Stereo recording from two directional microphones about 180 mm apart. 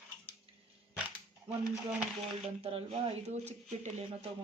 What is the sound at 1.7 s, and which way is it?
Speech, 5° right (ahead or behind).